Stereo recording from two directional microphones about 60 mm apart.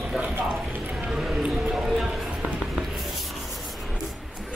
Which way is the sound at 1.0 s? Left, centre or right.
Centre.